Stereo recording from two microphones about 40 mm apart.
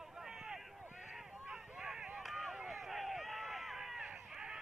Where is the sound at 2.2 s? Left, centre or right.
Centre.